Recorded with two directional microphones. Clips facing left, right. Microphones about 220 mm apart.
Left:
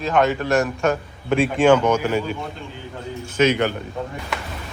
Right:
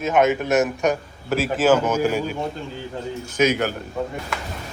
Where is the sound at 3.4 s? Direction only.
5° right (ahead or behind).